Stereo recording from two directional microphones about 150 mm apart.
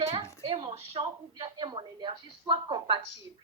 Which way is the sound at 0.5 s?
40° right (ahead or behind).